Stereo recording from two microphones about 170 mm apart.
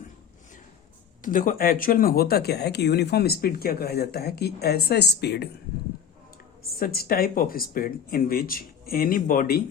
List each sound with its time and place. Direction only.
1.2 s speech: 55° left (ahead or behind); by 5.5 s 75° left (ahead or behind)
6.6 s speech: 60° left (ahead or behind)